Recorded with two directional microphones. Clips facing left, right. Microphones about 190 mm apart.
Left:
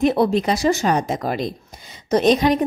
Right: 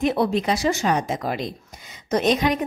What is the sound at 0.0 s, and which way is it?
A woman's voice, 35° left (ahead or behind).